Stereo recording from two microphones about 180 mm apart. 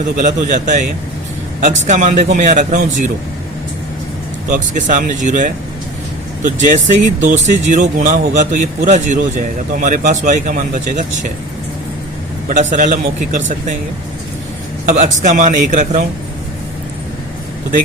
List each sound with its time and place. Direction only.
0.2 s speech: 45° right (ahead or behind)
1.9 s speech: 45° right (ahead or behind)
4.4 s speech: 45° right (ahead or behind)
12.7 s speech: 45° right (ahead or behind)
14.8 s speech: 45° right (ahead or behind)